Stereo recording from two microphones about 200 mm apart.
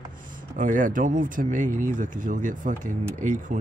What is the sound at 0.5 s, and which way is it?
Speech, 40° right (ahead or behind).